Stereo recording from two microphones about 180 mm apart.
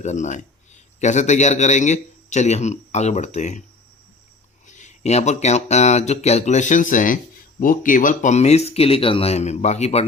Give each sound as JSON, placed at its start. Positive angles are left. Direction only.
{"t": 0.0, "sound": "a man's voice", "side_deg": 40}
{"t": 4.6, "sound": "speech", "side_deg": 40}